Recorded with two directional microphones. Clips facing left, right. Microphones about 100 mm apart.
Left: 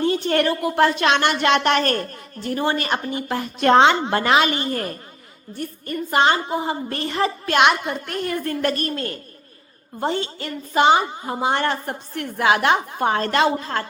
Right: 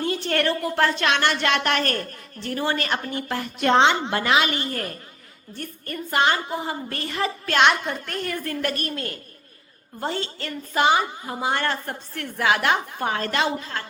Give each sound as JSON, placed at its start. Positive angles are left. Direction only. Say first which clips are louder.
{"t": 0.0, "sound": "a woman's voice", "louder": "left 4 dB", "side_deg": 20}
{"t": 3.6, "sound": "a woman's voice", "louder": "left 4 dB", "side_deg": 50}
{"t": 4.1, "sound": "a woman's voice", "louder": "left 3 dB", "side_deg": 40}
{"t": 5.5, "sound": "a woman's voice", "louder": "left 5 dB", "side_deg": 15}
{"t": 7.4, "sound": "a woman's voice", "louder": "left 1 dB", "side_deg": 15}
{"t": 10.0, "sound": "a woman's voice", "louder": "left 4 dB", "side_deg": 20}
{"t": 10.8, "sound": "a woman's voice", "louder": "left 3 dB", "side_deg": 25}
{"t": 13.3, "sound": "a woman's voice", "louder": "left 5 dB", "side_deg": 45}